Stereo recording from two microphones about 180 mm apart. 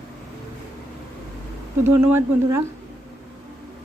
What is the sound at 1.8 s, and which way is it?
Speech, 15° right (ahead or behind).